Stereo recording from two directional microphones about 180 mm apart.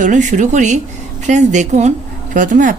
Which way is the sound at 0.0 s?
45° right (ahead or behind).